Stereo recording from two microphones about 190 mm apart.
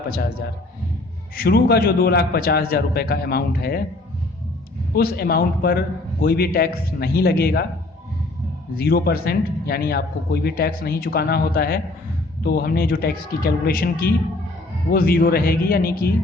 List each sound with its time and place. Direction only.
1.4 s a man's voice: 55° left (ahead or behind)
4.9 s a man's voice: 55° left (ahead or behind)
8.7 s a man's voice: 55° left (ahead or behind)